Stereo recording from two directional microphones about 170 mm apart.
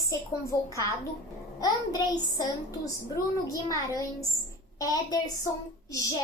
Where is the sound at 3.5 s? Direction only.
20° left (ahead or behind).